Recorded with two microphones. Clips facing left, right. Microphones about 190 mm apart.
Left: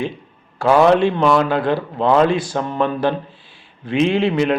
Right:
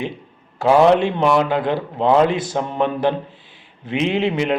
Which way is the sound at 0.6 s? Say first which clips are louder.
Even; 20° right (ahead or behind).